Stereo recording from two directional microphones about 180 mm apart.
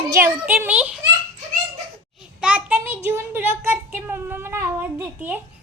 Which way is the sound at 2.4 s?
5° right (ahead or behind).